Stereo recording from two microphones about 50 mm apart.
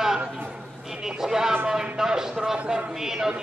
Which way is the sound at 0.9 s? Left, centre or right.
Centre.